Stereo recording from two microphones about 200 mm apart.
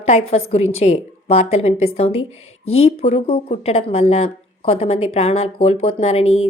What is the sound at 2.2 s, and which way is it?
Speech, 90° left.